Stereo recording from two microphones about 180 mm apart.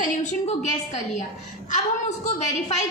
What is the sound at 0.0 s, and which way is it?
A woman's voice, 40° left (ahead or behind).